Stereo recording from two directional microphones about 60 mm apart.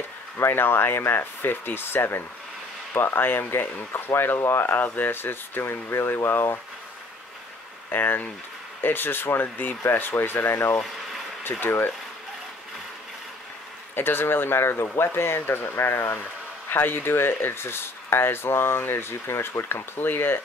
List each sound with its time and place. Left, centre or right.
0.4 s speech: left
7.9 s speech: left
13.9 s speech: left